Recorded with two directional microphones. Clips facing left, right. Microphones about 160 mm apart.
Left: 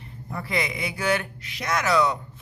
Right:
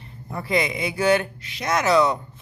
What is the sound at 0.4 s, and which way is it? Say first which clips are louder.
Speech: right 5 dB; 25° right (ahead or behind).